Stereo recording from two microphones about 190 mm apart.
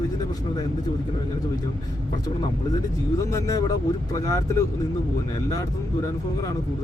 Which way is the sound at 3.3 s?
15° left (ahead or behind).